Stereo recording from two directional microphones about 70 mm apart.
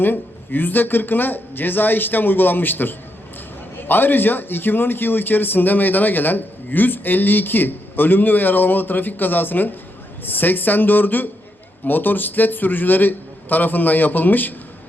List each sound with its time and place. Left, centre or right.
0.0 s speech: left